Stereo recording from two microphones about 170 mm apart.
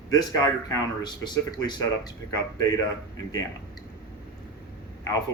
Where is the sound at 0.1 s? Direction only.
20° left (ahead or behind).